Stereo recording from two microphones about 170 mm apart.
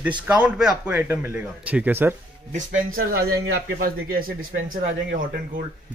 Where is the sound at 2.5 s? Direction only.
55° right (ahead or behind).